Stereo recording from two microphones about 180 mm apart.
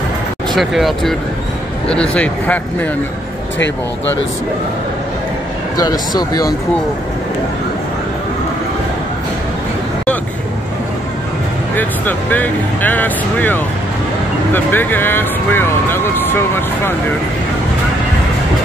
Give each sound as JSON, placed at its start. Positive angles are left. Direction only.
{"t": 0.6, "sound": "speech", "side_deg": 0}
{"t": 5.8, "sound": "speech", "side_deg": 20}
{"t": 11.7, "sound": "speech", "side_deg": 10}